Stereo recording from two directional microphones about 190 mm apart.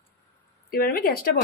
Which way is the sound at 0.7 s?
50° left (ahead or behind).